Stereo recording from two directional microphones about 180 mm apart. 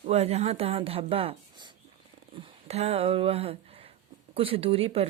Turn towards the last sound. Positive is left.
turn(degrees=-30)  # may be behind; listen again after turning